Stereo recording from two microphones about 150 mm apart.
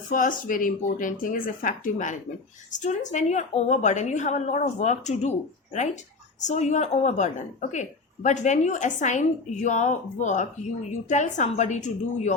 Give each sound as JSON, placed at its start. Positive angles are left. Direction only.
{"t": 0.1, "sound": "a woman's voice", "side_deg": 60}
{"t": 6.4, "sound": "a woman's voice", "side_deg": 50}